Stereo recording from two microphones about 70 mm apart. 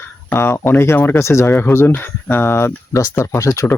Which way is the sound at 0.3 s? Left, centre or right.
Left.